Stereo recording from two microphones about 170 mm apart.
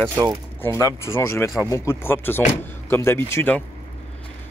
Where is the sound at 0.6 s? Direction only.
15° left (ahead or behind).